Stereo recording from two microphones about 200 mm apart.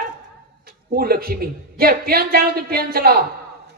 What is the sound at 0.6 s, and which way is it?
Speech, 50° right (ahead or behind).